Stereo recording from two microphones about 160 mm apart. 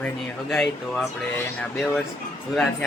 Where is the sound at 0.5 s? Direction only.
5° left (ahead or behind).